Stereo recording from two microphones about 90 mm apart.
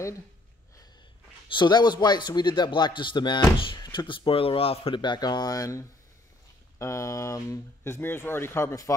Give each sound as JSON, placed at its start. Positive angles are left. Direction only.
{"t": 1.5, "sound": "speech", "side_deg": 55}
{"t": 3.5, "sound": "speech", "side_deg": 70}
{"t": 3.8, "sound": "speech", "side_deg": 60}